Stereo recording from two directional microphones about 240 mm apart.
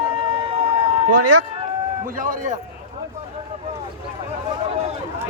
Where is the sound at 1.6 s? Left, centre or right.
Right.